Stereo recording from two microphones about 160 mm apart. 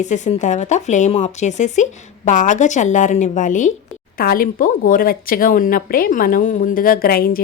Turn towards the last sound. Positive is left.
turn(degrees=65)  # may be behind; listen again after turning